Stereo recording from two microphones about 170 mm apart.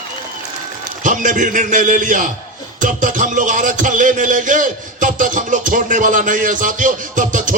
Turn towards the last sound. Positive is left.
turn(degrees=-50)  # may be behind; listen again after turning